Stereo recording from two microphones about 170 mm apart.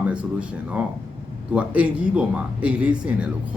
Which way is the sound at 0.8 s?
10° right (ahead or behind).